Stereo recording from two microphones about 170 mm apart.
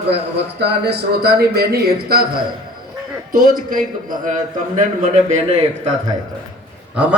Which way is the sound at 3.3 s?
55° right (ahead or behind).